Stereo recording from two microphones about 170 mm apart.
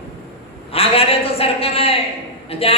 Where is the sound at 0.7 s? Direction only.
35° left (ahead or behind).